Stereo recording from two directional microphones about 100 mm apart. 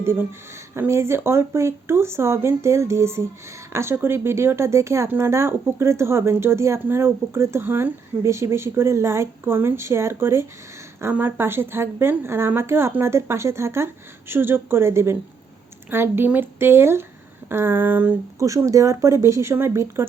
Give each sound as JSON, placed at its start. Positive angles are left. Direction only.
{"t": 0.0, "sound": "speech", "side_deg": -25}
{"t": 18.3, "sound": "speech", "side_deg": -30}